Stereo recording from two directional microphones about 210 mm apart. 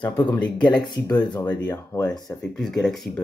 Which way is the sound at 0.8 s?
20° left (ahead or behind).